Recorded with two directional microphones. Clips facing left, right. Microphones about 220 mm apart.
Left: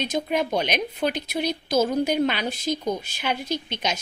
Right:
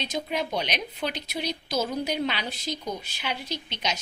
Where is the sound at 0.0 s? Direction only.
50° left (ahead or behind).